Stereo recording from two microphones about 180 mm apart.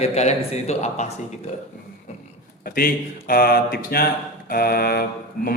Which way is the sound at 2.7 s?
55° left (ahead or behind).